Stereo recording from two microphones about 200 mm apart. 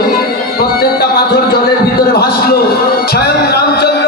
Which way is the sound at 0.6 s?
50° left (ahead or behind).